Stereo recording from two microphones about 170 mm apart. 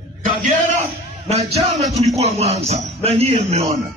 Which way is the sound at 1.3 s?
35° right (ahead or behind).